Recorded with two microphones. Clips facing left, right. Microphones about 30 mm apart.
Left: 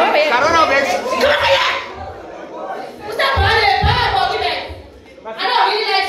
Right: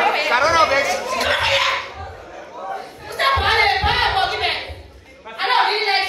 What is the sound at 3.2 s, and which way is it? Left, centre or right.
Music, centre.